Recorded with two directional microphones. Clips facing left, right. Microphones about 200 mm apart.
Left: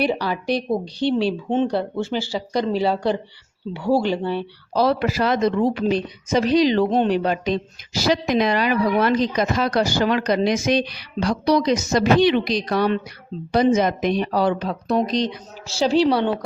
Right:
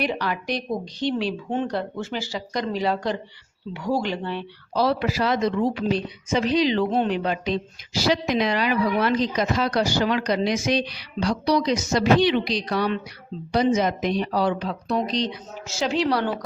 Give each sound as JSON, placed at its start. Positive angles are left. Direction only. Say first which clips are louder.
{"t": 0.0, "sound": "a woman's voice", "louder": "left 4 dB", "side_deg": 30}
{"t": 15.6, "sound": "speech", "louder": "left 6 dB", "side_deg": 30}